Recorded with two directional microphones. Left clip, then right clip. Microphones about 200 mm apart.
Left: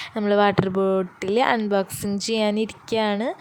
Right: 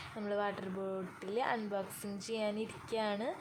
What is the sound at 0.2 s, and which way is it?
Speech, 45° left (ahead or behind).